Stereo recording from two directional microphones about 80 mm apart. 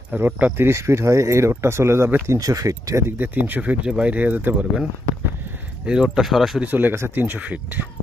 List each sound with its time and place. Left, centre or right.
0.1 s speech: right
3.1 s speech: right
5.8 s speech: centre
6.6 s speech: right